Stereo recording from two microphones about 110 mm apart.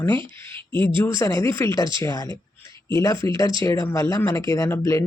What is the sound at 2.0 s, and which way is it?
Speech, 35° left (ahead or behind).